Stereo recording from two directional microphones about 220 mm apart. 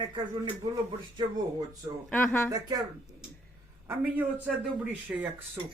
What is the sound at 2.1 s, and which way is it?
Speech, 10° left (ahead or behind).